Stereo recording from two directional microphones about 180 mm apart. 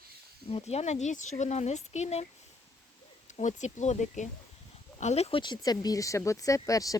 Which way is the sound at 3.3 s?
40° left (ahead or behind).